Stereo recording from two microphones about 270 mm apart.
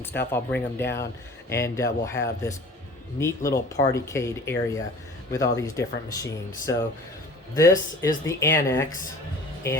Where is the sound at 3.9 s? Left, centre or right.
Centre.